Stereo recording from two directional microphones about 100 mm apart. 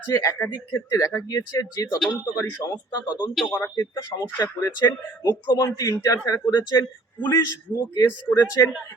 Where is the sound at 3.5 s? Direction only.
30° left (ahead or behind).